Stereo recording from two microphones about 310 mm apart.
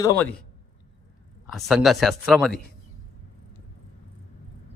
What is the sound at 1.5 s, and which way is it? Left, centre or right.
Speech, centre.